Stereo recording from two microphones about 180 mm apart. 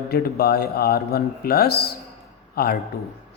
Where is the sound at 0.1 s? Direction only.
60° left (ahead or behind).